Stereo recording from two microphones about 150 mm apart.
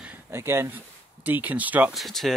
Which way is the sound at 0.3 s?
15° right (ahead or behind).